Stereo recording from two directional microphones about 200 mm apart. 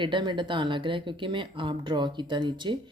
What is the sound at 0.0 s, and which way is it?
Speech, 25° right (ahead or behind).